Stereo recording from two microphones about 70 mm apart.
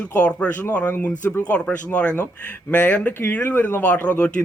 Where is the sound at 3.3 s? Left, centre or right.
Left.